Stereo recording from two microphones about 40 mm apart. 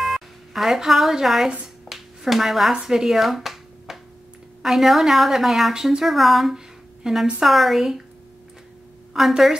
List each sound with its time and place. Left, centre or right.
0.0 s speech: centre
1.9 s a sound: centre
2.7 s a woman's voice: centre
6.0 s a woman's voice: centre
6.5 s a sound: centre
7.4 s a woman's voice: centre
9.1 s speech: centre